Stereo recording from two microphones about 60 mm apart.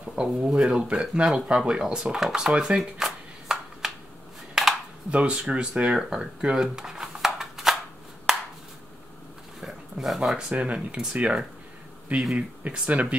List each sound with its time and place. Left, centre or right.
0.0 s speech: centre
2.8 s a sound: centre
5.1 s speech: centre
8.3 s a sound: centre
9.6 s dog: centre
10.5 s speech: right